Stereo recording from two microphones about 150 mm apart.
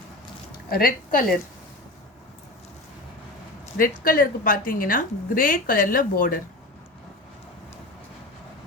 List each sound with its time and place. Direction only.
0.7 s a woman's voice: 75° left (ahead or behind)
3.8 s a woman's voice: 70° left (ahead or behind)